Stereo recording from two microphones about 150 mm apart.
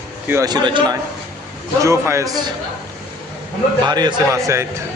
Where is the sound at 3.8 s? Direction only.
30° right (ahead or behind).